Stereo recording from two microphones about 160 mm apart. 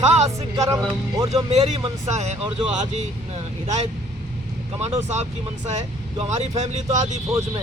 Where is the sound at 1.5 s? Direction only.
45° right (ahead or behind).